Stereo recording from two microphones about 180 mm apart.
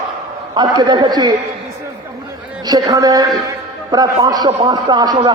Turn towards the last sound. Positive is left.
turn(degrees=-25)  # may be behind; listen again after turning